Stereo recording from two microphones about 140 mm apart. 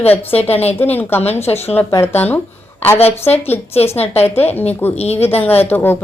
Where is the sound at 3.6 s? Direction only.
45° left (ahead or behind).